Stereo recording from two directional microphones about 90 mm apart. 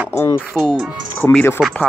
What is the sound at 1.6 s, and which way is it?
Speech, centre (ahead or behind).